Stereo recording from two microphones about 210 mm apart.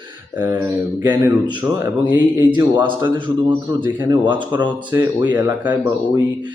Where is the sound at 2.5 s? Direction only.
20° right (ahead or behind).